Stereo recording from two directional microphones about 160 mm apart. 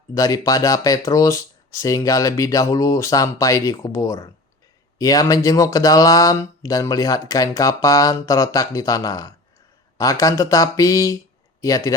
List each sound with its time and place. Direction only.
0.1 s speech: 20° left (ahead or behind)